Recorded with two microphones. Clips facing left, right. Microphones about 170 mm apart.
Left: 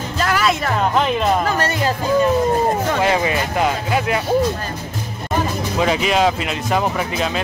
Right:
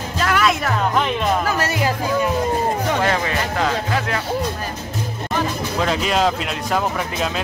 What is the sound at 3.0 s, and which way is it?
Music, 10° left (ahead or behind).